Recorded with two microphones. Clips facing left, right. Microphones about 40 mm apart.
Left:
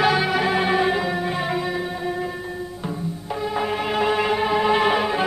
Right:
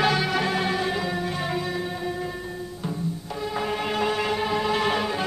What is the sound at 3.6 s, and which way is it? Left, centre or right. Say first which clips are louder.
Music: left 3 dB; centre.